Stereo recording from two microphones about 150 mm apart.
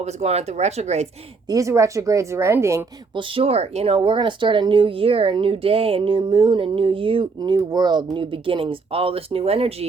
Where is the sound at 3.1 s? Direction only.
40° right (ahead or behind).